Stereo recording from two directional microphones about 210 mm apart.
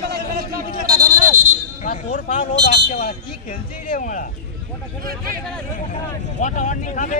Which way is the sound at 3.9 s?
40° left (ahead or behind).